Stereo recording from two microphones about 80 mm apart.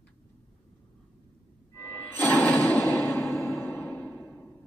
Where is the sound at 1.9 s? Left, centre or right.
Left.